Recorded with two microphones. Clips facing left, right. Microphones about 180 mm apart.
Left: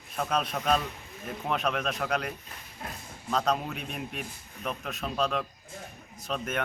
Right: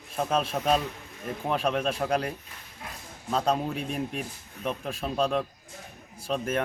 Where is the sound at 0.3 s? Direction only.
5° right (ahead or behind).